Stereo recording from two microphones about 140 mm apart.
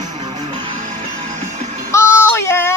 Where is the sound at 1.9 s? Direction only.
20° left (ahead or behind).